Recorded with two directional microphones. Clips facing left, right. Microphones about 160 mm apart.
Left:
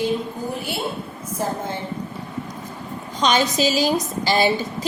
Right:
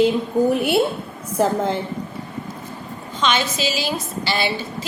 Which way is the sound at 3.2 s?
40° left (ahead or behind).